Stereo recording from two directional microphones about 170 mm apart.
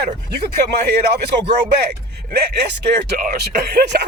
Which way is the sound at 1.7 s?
75° right (ahead or behind).